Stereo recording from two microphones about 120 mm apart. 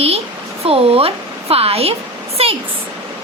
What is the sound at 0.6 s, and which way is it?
Speech, 55° right (ahead or behind).